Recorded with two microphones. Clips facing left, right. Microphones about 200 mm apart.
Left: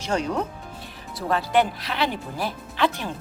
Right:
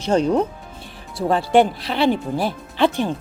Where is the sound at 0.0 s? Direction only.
30° right (ahead or behind).